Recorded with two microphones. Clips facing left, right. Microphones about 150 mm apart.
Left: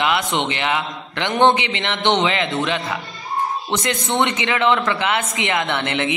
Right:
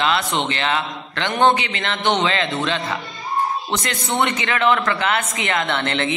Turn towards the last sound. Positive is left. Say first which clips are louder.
# even
turn(degrees=15)  # may be behind; listen again after turning